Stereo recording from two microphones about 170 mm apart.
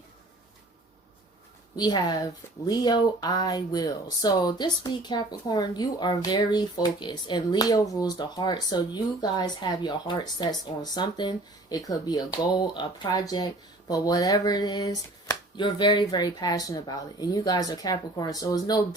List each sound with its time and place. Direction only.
1.7 s speech: 25° left (ahead or behind)